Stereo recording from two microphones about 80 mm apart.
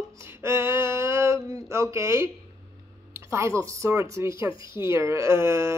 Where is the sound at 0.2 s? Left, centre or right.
Right.